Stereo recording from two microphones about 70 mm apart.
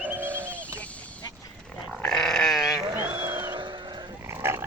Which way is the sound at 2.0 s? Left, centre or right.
Centre.